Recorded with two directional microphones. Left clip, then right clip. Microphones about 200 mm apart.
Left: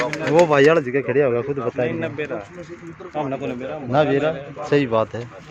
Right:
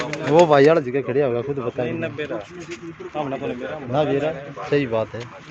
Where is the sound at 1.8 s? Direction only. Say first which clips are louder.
Left 2 dB; 55° left (ahead or behind).